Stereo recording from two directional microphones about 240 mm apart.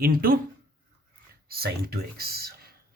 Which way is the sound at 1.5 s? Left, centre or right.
Right.